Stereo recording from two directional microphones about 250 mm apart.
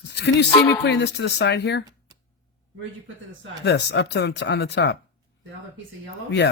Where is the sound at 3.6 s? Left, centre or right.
Left.